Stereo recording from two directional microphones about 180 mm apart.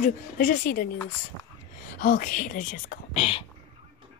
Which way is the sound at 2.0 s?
50° left (ahead or behind).